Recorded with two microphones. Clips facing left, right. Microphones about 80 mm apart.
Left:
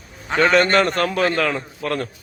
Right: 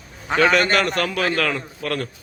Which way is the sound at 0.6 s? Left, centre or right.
Left.